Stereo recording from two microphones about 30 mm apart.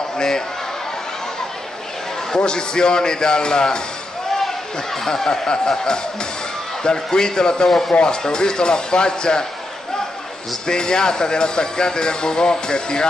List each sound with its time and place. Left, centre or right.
2.3 s speech: left
5.0 s speech: centre
5.5 s speech: left
10.7 s speech: left